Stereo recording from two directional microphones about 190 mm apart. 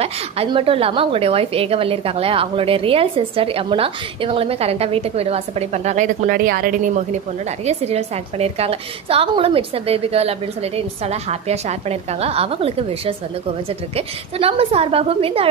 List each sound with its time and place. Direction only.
0.0 s a woman's voice: 30° right (ahead or behind)
7.6 s a woman's voice: 35° right (ahead or behind)